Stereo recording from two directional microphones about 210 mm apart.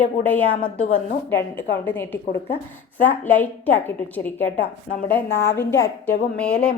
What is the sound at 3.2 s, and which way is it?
Female singing, 10° left (ahead or behind).